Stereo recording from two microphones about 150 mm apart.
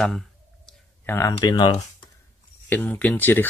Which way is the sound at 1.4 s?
30° left (ahead or behind).